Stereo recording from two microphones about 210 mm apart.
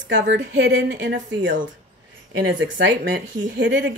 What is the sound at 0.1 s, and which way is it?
Speech, 60° right (ahead or behind).